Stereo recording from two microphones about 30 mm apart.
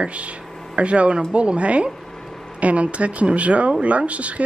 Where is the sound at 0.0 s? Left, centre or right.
Right.